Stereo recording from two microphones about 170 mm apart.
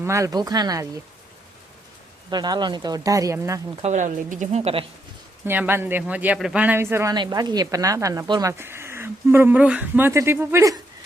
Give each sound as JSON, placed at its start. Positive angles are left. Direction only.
{"t": 0.0, "sound": "speech", "side_deg": -15}
{"t": 2.3, "sound": "speech", "side_deg": -25}
{"t": 3.8, "sound": "speech", "side_deg": -45}
{"t": 5.5, "sound": "a man's voice", "side_deg": -10}